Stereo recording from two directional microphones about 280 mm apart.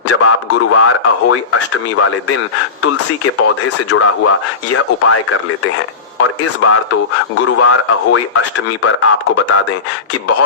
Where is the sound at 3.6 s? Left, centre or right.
Left.